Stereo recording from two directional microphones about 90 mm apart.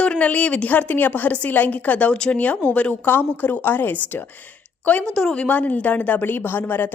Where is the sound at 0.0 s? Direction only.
15° left (ahead or behind).